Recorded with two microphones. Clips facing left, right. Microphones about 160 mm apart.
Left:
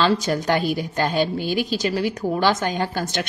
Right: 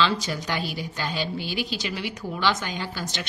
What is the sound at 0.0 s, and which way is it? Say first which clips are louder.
A woman's voice: left 5 dB; 50° left (ahead or behind).